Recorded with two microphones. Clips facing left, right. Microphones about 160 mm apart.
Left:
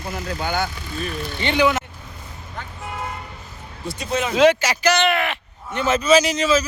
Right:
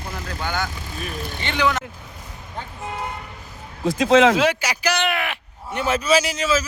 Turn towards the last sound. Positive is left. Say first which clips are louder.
# left 3 dB
turn(degrees=-5)  # may be behind; listen again after turning